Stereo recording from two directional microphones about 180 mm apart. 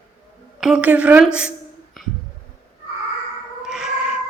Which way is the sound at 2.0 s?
Centre (ahead or behind).